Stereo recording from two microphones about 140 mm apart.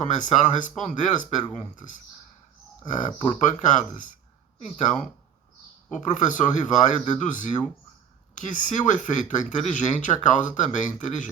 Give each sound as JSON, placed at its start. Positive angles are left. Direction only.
{"t": 0.0, "sound": "speech", "side_deg": 65}
{"t": 5.9, "sound": "speech", "side_deg": 65}